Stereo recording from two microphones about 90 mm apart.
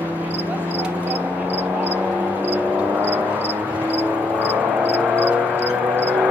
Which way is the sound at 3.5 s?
25° right (ahead or behind).